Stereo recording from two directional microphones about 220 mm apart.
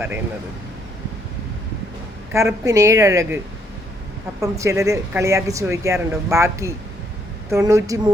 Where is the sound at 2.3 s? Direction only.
15° right (ahead or behind).